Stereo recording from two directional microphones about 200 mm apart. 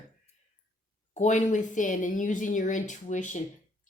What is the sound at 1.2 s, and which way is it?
A woman's voice, 40° left (ahead or behind).